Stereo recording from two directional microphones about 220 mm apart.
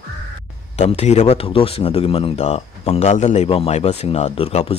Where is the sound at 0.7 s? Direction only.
30° left (ahead or behind).